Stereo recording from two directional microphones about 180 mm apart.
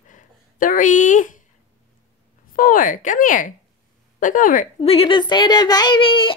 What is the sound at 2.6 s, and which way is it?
Speech, 50° left (ahead or behind).